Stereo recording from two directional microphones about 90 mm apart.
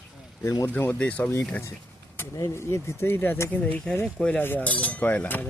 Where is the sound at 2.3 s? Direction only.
30° left (ahead or behind).